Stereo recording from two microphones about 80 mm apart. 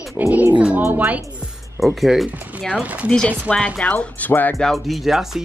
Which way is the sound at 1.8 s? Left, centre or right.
Centre.